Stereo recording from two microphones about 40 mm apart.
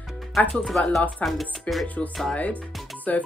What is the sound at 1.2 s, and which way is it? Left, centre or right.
Speech, left.